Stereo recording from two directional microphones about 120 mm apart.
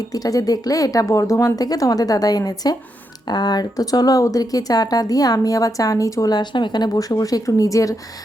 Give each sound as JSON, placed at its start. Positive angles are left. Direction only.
{"t": 0.0, "sound": "speech", "side_deg": 30}